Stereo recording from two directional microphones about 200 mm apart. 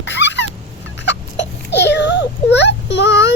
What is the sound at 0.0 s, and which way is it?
Dog, 60° left (ahead or behind).